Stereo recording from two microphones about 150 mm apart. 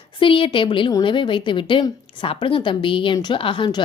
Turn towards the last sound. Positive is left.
turn(degrees=30)  # may be behind; listen again after turning